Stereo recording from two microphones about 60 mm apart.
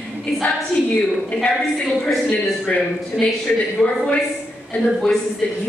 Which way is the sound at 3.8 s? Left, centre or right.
Centre.